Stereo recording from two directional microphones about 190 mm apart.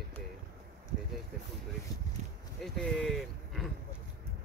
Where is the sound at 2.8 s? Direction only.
5° left (ahead or behind).